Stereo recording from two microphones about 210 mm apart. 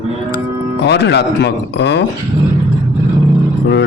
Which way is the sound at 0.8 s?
55° left (ahead or behind).